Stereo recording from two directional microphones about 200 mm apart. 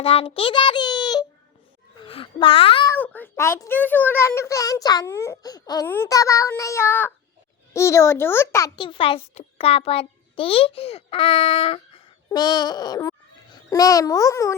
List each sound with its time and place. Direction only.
0.0 s a child's voice: 30° left (ahead or behind)
2.9 s a child's voice: 10° left (ahead or behind)